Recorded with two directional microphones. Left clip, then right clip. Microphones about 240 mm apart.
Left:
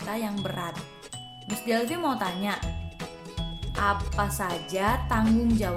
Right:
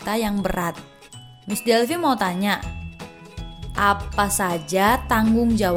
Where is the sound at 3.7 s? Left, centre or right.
Right.